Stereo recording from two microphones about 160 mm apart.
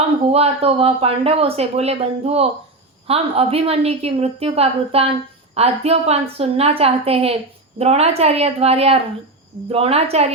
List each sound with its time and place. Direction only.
0.3 s speech: 40° right (ahead or behind)